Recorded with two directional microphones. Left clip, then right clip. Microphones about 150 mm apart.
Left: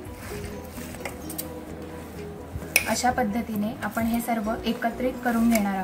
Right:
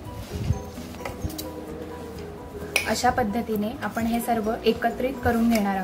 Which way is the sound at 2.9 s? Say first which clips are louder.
Right 1 dB; 20° right (ahead or behind).